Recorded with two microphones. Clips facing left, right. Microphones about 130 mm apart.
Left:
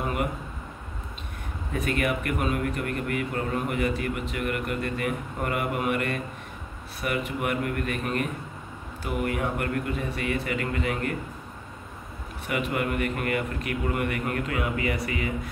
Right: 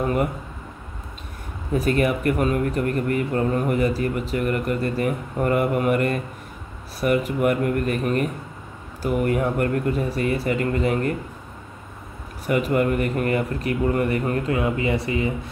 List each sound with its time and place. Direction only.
1.7 s a man's voice: 35° right (ahead or behind)
12.4 s a man's voice: 40° right (ahead or behind)